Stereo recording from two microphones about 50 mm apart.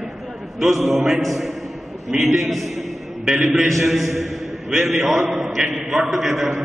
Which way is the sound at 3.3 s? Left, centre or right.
Centre.